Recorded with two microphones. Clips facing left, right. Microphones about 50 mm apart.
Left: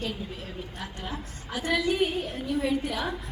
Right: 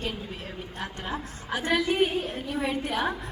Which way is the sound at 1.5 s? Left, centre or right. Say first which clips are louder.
Right 1 dB; right.